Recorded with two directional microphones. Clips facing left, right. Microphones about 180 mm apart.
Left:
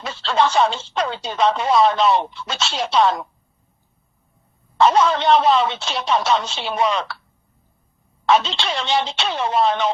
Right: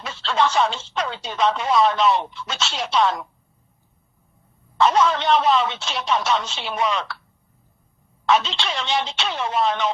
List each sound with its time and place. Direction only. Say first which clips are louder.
0.0 s speech: left 2 dB; 35° left (ahead or behind)
4.8 s speech: left 2 dB; 35° left (ahead or behind)
8.3 s speech: left 2 dB; 35° left (ahead or behind)